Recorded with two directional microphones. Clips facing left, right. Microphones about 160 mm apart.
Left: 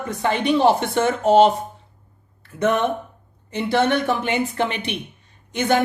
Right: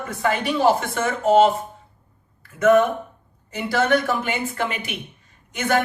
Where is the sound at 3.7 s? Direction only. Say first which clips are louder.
Left 1 dB; 25° left (ahead or behind).